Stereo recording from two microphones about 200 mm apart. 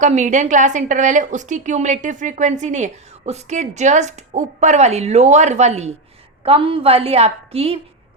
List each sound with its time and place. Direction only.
0.0 s a woman's voice: 35° right (ahead or behind)